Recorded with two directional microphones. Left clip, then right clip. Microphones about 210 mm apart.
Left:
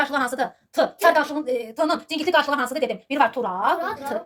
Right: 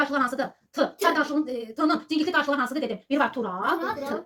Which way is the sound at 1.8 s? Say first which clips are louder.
Even; 40° left (ahead or behind).